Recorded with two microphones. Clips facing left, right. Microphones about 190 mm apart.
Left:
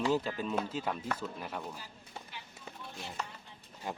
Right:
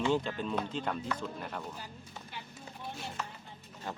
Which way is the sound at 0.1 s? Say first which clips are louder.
Even; 5° left (ahead or behind).